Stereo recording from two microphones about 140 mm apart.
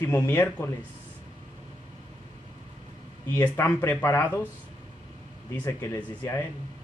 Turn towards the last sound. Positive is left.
turn(degrees=15)  # may be behind; listen again after turning